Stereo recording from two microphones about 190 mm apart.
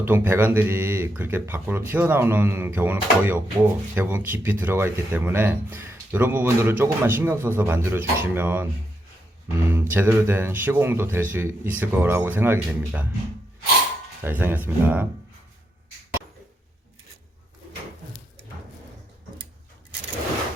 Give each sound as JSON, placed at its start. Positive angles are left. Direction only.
{"t": 0.0, "sound": "speech", "side_deg": -10}
{"t": 9.6, "sound": "speech", "side_deg": -10}
{"t": 14.3, "sound": "speech", "side_deg": -10}